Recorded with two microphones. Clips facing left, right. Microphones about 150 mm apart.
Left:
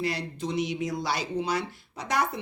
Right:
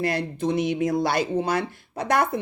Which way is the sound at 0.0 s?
55° right (ahead or behind).